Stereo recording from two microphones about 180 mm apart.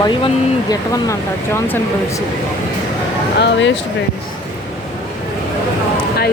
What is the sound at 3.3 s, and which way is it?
Speech, 75° left (ahead or behind).